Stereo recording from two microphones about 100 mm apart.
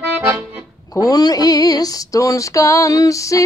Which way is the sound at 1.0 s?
40° left (ahead or behind).